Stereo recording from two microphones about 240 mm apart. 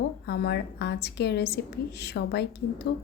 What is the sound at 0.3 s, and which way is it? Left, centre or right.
A woman's voice, left.